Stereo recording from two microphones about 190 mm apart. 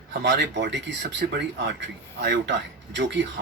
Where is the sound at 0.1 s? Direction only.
65° right (ahead or behind).